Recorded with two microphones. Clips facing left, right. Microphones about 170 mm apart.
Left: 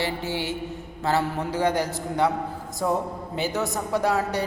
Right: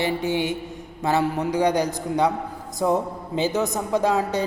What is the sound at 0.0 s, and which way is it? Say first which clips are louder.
A woman's voice: right 5 dB; 20° right (ahead or behind).